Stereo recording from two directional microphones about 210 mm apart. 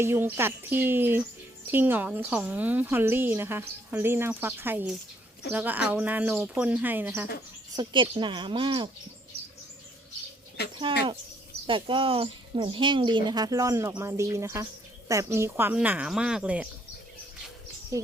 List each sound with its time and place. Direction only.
0.0 s speech: 10° right (ahead or behind)
7.8 s speech: 25° right (ahead or behind)
10.6 s speech: 50° left (ahead or behind)
11.6 s speech: 25° right (ahead or behind); by 16.6 s 5° right (ahead or behind)